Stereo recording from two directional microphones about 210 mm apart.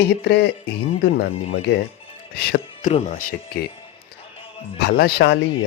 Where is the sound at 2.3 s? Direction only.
45° left (ahead or behind).